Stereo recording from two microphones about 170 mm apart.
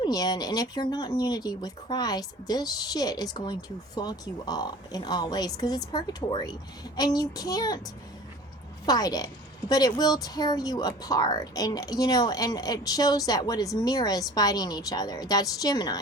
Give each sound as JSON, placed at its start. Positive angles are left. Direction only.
{"t": 0.0, "sound": "speech", "side_deg": 25}
{"t": 8.9, "sound": "a woman's voice", "side_deg": 25}